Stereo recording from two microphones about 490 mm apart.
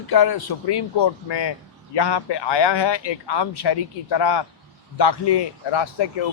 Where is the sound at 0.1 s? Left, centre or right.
Left.